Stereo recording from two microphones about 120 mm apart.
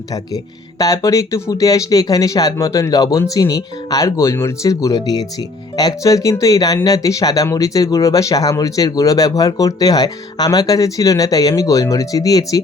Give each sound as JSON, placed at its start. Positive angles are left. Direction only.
{"t": 0.8, "sound": "speech", "side_deg": 25}